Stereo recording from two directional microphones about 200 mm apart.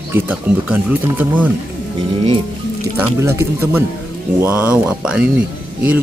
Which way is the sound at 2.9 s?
10° right (ahead or behind).